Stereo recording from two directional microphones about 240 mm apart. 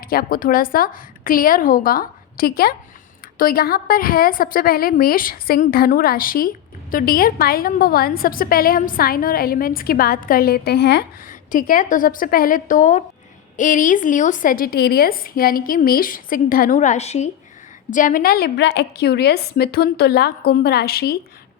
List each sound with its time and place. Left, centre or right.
0.0 s a woman's voice: left